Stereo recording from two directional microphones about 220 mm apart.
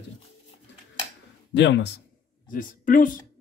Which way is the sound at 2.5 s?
40° left (ahead or behind).